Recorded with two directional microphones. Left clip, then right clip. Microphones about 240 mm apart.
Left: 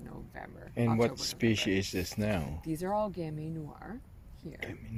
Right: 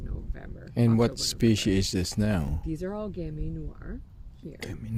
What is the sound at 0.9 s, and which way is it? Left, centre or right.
Speech, right.